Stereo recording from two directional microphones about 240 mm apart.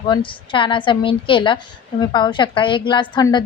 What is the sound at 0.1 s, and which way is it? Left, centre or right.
A woman's voice, left.